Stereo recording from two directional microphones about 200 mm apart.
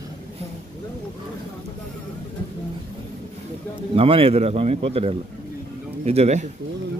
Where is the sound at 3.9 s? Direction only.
25° right (ahead or behind).